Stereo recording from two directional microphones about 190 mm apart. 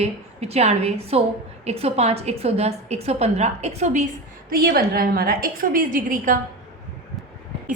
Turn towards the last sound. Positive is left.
turn(degrees=-45)  # may be behind; listen again after turning